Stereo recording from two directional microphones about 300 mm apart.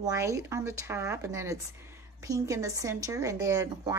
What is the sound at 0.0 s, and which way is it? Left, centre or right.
Speech, centre.